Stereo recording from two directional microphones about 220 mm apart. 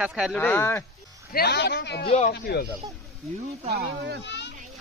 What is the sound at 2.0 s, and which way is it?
Speech, 30° left (ahead or behind).